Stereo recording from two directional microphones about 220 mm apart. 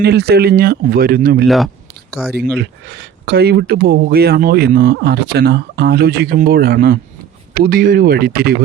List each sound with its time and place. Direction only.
0.0 s speech: 45° right (ahead or behind)
1.5 s speech: centre (ahead or behind)
2.6 s speech: 50° right (ahead or behind)